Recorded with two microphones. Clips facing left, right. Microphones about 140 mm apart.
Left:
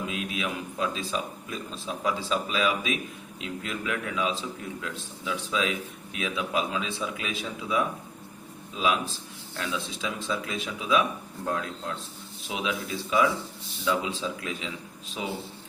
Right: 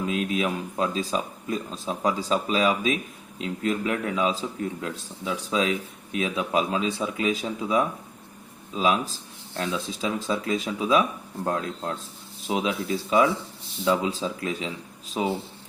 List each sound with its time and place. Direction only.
0.1 s a man's voice: 35° right (ahead or behind)